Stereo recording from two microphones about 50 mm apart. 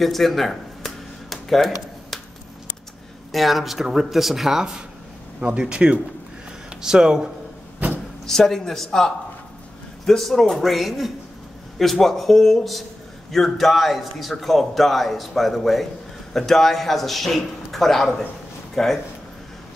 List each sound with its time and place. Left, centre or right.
0.0 s a sound: centre
3.3 s a man's voice: centre
8.3 s a man's voice: centre